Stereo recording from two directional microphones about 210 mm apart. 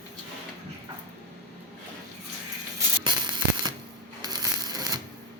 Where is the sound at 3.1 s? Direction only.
20° right (ahead or behind).